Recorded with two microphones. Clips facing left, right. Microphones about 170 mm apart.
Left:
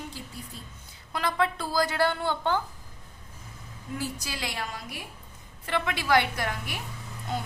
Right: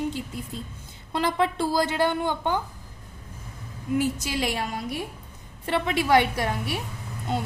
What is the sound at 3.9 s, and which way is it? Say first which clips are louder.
Speech: right 9 dB; 20° right (ahead or behind).